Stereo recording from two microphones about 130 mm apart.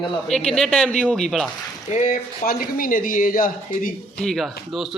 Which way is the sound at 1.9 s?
80° left.